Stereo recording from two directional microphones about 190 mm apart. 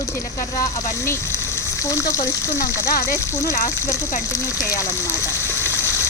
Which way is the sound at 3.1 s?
15° left (ahead or behind).